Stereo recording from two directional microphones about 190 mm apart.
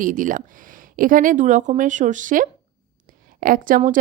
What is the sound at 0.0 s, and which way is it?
Speech, 45° right (ahead or behind).